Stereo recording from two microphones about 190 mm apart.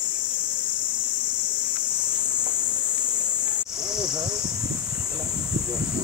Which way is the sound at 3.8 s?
20° right (ahead or behind).